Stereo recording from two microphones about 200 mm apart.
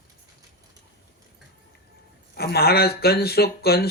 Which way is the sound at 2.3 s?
50° left (ahead or behind).